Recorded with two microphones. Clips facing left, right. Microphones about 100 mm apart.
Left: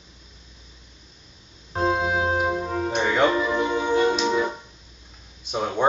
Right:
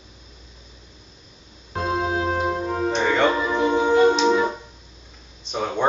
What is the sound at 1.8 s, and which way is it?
Organ, 20° left (ahead or behind).